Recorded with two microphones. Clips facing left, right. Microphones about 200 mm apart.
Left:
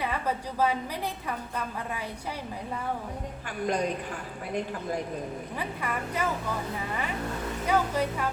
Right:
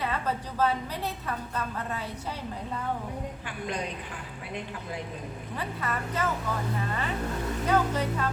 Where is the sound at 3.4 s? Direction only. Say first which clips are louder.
Left 8 dB; 40° left (ahead or behind).